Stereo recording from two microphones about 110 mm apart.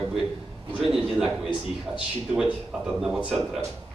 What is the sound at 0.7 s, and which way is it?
A man's voice, 5° right (ahead or behind).